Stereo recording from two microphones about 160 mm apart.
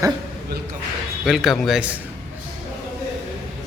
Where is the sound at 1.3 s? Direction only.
Centre (ahead or behind).